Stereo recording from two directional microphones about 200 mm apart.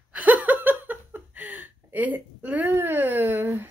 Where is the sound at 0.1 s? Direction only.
5° right (ahead or behind).